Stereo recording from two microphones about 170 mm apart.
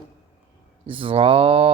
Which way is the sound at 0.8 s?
30° right (ahead or behind).